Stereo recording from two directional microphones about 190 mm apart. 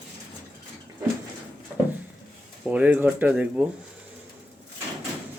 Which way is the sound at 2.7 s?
10° right (ahead or behind).